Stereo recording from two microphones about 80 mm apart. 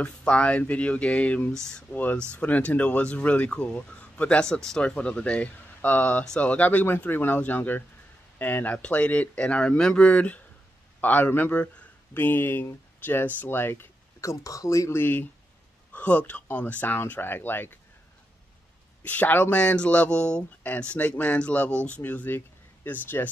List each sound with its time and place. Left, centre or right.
0.0 s speech: centre
14.2 s speech: left
15.0 s speech: left
19.0 s speech: left